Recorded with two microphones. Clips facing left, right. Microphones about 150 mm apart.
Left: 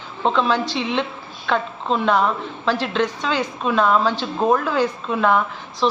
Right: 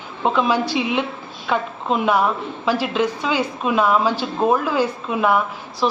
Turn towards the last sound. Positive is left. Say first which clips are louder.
# even
turn(degrees=-10)  # may be behind; listen again after turning